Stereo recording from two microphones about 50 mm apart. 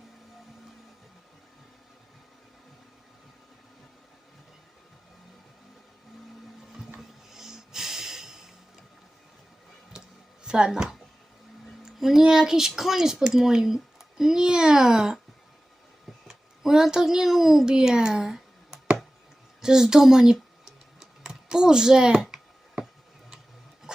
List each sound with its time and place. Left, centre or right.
7.3 s snort: centre
9.9 s a sound: centre
10.4 s speech: centre
11.9 s speech: centre
16.2 s speech: centre
21.0 s typing: centre